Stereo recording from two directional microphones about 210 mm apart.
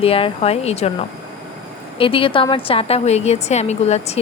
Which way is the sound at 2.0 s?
25° left (ahead or behind).